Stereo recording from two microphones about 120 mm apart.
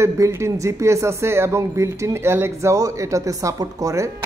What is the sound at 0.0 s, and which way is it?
Speech, 25° right (ahead or behind).